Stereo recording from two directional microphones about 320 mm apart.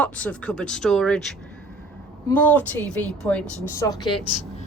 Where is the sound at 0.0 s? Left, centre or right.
Centre.